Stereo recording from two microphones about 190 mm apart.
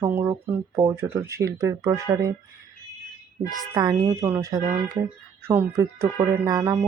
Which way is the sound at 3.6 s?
20° right (ahead or behind).